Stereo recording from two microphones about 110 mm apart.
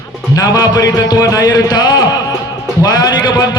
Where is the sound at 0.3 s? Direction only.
35° left (ahead or behind).